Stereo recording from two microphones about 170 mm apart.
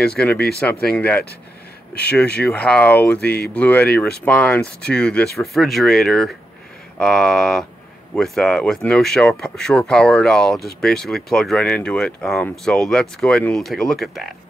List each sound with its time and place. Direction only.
0.0 s speech: 5° left (ahead or behind)
2.4 s speech: 5° left (ahead or behind)
3.2 s speech: 70° left (ahead or behind)
3.5 s speech: 10° left (ahead or behind)